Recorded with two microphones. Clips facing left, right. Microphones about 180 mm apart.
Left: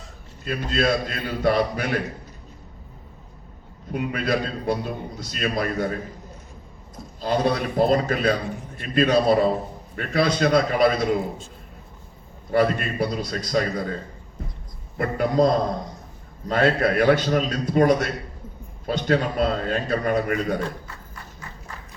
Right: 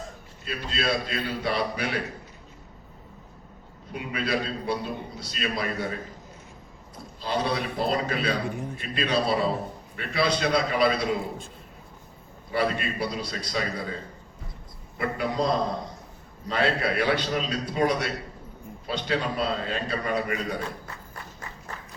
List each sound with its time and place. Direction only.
0.4 s a man's voice: 45° left (ahead or behind)
3.9 s a man's voice: 50° left (ahead or behind)
7.2 s a man's voice: 45° left (ahead or behind)
12.5 s a man's voice: 50° left (ahead or behind)
14.9 s a man's voice: 45° left (ahead or behind)